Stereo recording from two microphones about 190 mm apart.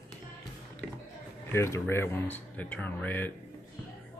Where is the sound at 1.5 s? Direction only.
15° left (ahead or behind).